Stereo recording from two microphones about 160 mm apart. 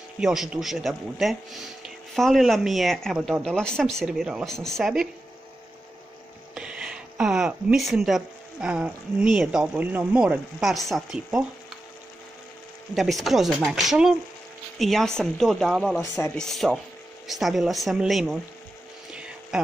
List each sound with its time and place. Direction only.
0.2 s speech: 5° right (ahead or behind)
6.5 s speech: 5° right (ahead or behind)
12.9 s speech: centre (ahead or behind)
16.0 s speech: 15° left (ahead or behind)
16.3 s speech: centre (ahead or behind)
19.1 s vehicle: 5° right (ahead or behind)